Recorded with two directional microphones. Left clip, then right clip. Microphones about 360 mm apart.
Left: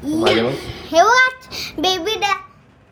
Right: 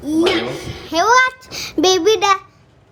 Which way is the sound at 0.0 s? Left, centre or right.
Centre.